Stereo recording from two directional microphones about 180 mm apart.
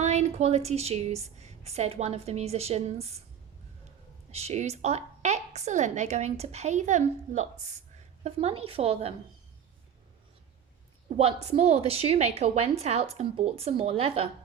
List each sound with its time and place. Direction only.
0.0 s a woman's voice: 40° right (ahead or behind)
4.3 s a woman's voice: 35° right (ahead or behind)
11.2 s a woman's voice: 35° right (ahead or behind)